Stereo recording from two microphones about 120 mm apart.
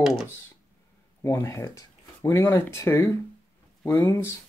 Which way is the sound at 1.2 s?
25° left (ahead or behind).